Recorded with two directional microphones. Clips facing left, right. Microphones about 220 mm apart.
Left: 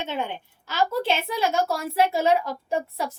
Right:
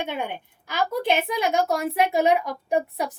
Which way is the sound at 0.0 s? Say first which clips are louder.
Even; 15° right (ahead or behind).